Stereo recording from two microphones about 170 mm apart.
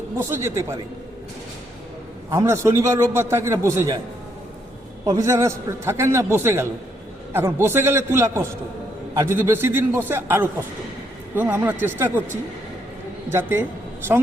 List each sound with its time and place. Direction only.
0.2 s a man's voice: 15° right (ahead or behind)
2.3 s a man's voice: 15° right (ahead or behind)
5.0 s a man's voice: 20° right (ahead or behind)